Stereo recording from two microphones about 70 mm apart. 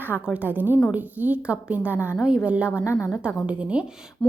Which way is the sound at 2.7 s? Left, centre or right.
Left.